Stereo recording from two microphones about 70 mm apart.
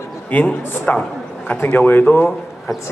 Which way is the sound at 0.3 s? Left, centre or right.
Left.